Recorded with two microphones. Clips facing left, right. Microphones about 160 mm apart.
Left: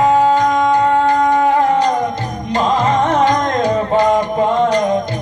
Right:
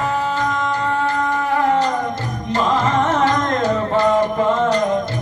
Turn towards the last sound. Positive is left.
turn(degrees=15)  # may be behind; listen again after turning